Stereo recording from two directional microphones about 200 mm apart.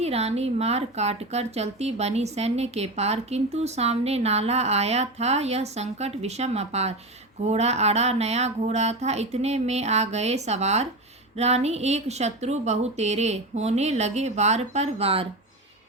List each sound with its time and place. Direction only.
0.0 s a woman's voice: 30° right (ahead or behind)